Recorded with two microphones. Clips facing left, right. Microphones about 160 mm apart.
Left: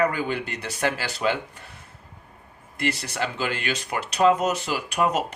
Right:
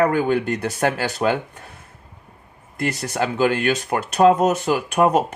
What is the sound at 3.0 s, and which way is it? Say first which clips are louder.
Speech: right 8 dB; 50° right (ahead or behind).